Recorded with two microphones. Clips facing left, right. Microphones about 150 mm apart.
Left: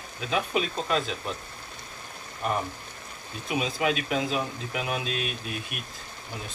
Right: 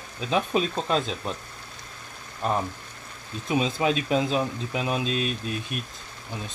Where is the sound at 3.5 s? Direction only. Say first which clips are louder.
Right 3 dB; 30° right (ahead or behind).